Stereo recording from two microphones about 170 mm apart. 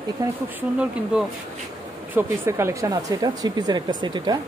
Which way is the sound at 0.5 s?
5° right (ahead or behind).